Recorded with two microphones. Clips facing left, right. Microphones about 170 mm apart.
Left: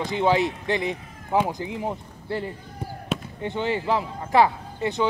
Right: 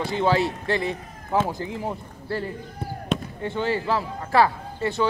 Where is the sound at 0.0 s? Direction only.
15° left (ahead or behind).